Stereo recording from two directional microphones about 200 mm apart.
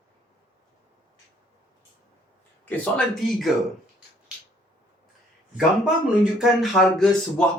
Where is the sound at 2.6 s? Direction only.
5° left (ahead or behind).